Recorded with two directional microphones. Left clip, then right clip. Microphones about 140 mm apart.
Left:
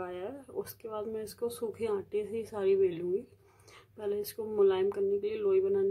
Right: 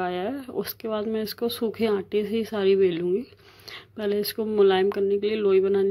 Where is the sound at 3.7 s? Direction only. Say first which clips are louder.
Right 8 dB; 25° right (ahead or behind).